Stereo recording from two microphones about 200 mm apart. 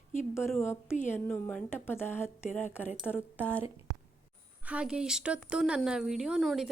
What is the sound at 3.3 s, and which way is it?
A woman's voice, 10° right (ahead or behind).